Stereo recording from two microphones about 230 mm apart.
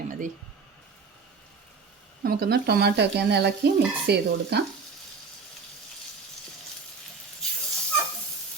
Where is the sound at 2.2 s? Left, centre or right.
Right.